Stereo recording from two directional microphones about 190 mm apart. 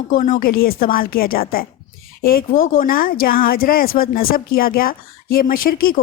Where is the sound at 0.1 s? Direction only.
45° left (ahead or behind).